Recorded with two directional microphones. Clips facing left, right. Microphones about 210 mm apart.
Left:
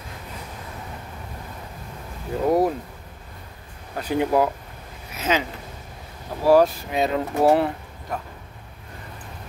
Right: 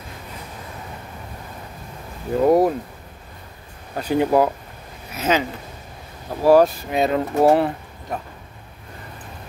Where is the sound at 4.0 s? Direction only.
35° right (ahead or behind).